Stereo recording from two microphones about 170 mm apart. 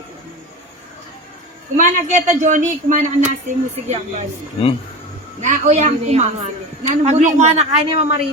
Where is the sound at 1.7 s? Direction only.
45° right (ahead or behind).